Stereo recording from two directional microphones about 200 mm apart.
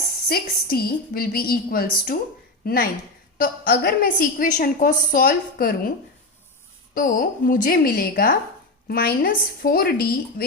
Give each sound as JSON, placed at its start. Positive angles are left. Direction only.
{"t": 0.3, "sound": "a woman's voice", "side_deg": 50}
{"t": 6.9, "sound": "a woman's voice", "side_deg": 45}